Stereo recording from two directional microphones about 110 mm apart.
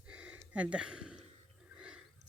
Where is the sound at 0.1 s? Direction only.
10° right (ahead or behind).